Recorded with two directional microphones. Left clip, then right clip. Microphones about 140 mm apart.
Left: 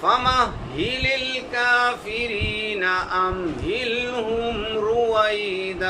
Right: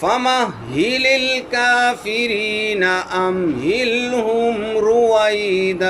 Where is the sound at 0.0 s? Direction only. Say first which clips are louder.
Right 2 dB; 50° right (ahead or behind).